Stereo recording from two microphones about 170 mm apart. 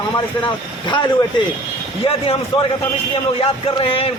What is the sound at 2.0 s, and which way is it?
Speech, 30° left (ahead or behind).